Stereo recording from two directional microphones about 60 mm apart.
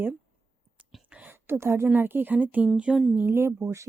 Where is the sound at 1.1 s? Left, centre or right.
Right.